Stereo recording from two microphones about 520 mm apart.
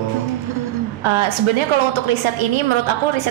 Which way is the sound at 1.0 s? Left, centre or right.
Right.